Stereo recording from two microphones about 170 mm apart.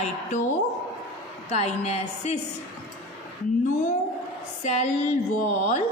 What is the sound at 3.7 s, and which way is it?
A woman's voice, 45° left (ahead or behind).